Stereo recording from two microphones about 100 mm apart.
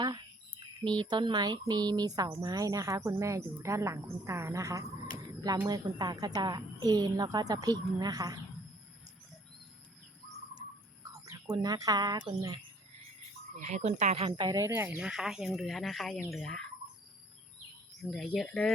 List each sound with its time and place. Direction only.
0.9 s a woman's voice: 50° right (ahead or behind); by 4.9 s 30° right (ahead or behind)
5.6 s a woman's voice: 40° right (ahead or behind)
11.1 s speech: 40° right (ahead or behind)
13.7 s speech: 90° right
14.5 s speech: 30° right (ahead or behind)
14.8 s speech: 10° right (ahead or behind)
18.0 s speech: 5° left (ahead or behind)